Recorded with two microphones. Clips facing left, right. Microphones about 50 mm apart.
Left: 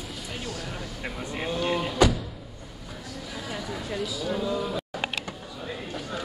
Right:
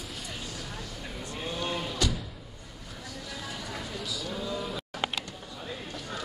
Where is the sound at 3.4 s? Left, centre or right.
Centre.